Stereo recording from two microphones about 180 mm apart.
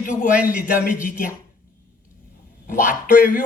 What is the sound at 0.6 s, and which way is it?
Speech, 50° left (ahead or behind).